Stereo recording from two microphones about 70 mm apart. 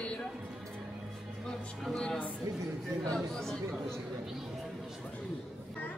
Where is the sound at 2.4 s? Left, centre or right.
Right.